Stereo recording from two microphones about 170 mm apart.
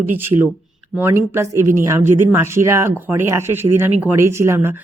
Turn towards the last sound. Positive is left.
turn(degrees=-15)  # may be behind; listen again after turning